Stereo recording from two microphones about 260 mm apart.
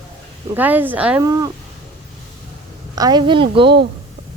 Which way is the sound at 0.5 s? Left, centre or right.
Centre.